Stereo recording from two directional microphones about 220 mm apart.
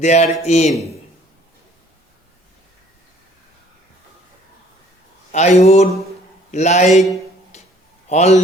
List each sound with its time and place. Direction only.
0.0 s speech: 30° left (ahead or behind)
5.3 s speech: 30° left (ahead or behind)
7.5 s a sound: 30° left (ahead or behind)
8.0 s a man's voice: 30° left (ahead or behind)